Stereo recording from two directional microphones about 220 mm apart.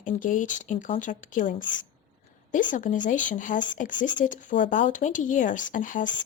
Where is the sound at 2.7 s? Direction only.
35° left (ahead or behind).